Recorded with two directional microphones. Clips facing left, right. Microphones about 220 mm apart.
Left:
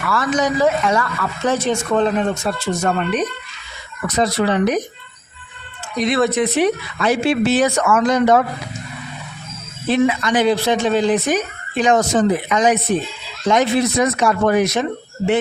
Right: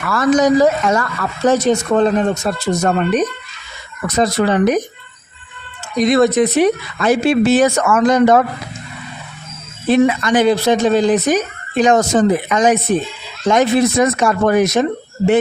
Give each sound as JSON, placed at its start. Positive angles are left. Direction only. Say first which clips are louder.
{"t": 0.1, "sound": "speech", "louder": "right 7 dB", "side_deg": -40}
{"t": 6.0, "sound": "speech", "louder": "right 5 dB", "side_deg": -40}
{"t": 9.9, "sound": "speech", "louder": "right 4 dB", "side_deg": -45}